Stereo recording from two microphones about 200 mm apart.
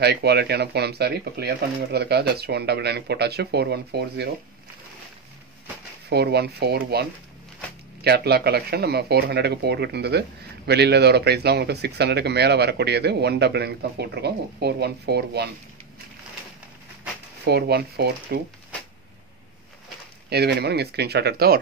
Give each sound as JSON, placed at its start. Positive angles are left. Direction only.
{"t": 0.0, "sound": "speech", "side_deg": -55}
{"t": 6.0, "sound": "speech", "side_deg": -55}
{"t": 17.5, "sound": "speech", "side_deg": -55}
{"t": 20.2, "sound": "speech", "side_deg": -55}